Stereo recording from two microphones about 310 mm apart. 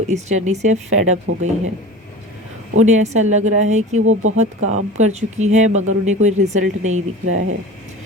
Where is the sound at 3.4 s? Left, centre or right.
Right.